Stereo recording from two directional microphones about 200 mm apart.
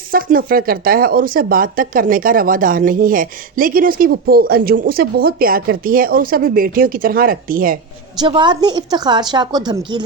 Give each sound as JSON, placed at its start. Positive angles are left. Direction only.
{"t": 0.1, "sound": "speech", "side_deg": -45}
{"t": 8.2, "sound": "a woman's voice", "side_deg": -25}